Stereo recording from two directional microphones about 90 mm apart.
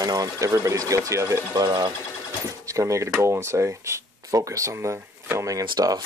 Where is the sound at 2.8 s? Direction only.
35° right (ahead or behind).